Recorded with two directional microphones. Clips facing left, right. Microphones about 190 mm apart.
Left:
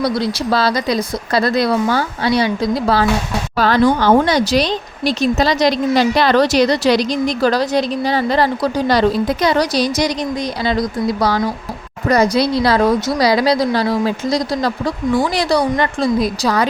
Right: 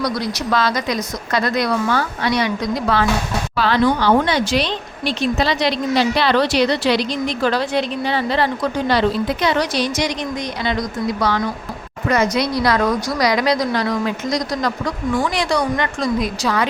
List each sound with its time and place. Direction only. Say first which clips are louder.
0.0 s speech: left 4 dB; 30° left (ahead or behind)